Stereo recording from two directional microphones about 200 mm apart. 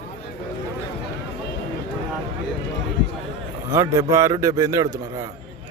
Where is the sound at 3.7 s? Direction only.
15° right (ahead or behind).